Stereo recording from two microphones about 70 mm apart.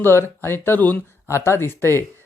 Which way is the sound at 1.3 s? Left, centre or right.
Left.